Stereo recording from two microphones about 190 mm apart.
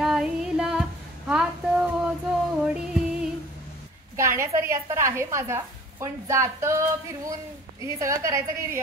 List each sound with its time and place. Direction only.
0.0 s female singing: 5° right (ahead or behind)
2.6 s music: 5° right (ahead or behind)
4.2 s a woman's voice: 15° right (ahead or behind)
7.8 s a woman's voice: 15° right (ahead or behind)